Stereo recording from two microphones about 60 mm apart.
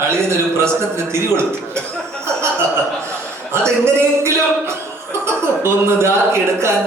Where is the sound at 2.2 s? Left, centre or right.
Right.